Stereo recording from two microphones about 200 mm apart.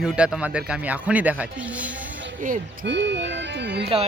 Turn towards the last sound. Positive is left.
turn(degrees=-55)  # may be behind; listen again after turning